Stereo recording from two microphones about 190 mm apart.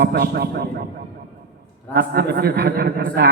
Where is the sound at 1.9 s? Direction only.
60° right (ahead or behind).